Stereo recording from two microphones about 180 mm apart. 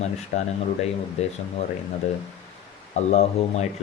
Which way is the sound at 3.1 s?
40° left (ahead or behind).